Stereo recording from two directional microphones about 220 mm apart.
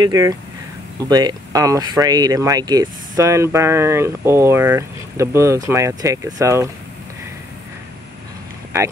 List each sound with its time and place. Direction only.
0.0 s speech: 15° right (ahead or behind)